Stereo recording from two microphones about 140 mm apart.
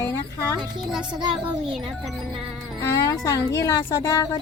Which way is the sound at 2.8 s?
25° left (ahead or behind).